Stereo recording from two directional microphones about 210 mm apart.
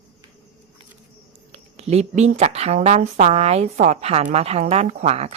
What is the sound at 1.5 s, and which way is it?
Speech, 30° right (ahead or behind).